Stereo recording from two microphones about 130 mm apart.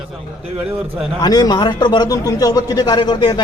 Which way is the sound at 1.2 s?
30° left (ahead or behind).